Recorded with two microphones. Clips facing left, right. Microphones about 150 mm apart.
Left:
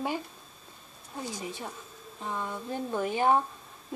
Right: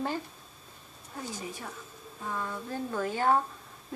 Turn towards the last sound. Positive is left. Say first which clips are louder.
# left 2 dB
turn(degrees=15)  # may be behind; listen again after turning